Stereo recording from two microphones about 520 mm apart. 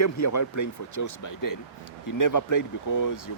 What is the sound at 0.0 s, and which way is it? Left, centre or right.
Speech, left.